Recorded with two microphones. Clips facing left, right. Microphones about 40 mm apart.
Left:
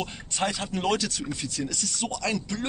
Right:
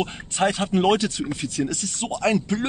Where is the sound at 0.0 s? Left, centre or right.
Right.